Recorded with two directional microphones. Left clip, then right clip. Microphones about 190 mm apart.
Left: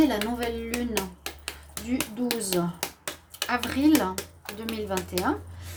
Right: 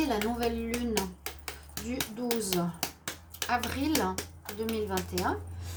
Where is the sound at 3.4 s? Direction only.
50° left (ahead or behind).